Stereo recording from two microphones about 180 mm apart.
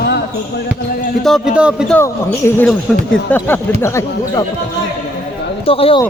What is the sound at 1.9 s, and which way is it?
Speech, 10° left (ahead or behind).